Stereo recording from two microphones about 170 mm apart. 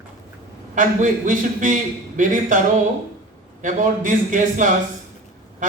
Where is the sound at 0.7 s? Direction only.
50° right (ahead or behind).